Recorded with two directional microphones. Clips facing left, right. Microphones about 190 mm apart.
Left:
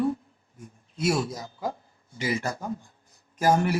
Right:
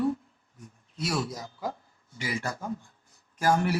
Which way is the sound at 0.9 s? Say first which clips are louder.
Left 5 dB; 25° left (ahead or behind).